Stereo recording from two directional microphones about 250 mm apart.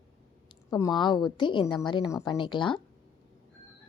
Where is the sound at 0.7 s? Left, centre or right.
Centre.